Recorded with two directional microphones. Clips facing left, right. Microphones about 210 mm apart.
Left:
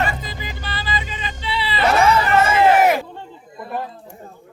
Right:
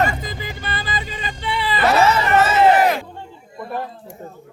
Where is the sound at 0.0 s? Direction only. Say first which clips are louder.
Right 3 dB; 50° right (ahead or behind).